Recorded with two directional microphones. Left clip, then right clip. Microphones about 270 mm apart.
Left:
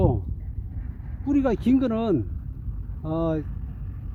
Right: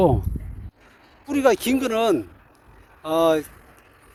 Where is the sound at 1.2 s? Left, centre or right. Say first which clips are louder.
Right 5 dB; right.